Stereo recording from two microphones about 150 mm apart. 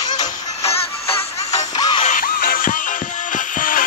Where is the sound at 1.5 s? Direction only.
25° left (ahead or behind).